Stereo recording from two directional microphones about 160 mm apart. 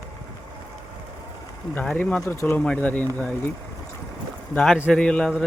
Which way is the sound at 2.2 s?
20° left (ahead or behind).